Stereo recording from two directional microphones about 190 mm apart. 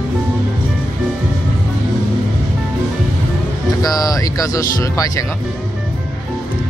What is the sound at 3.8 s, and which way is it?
Speech, 20° left (ahead or behind).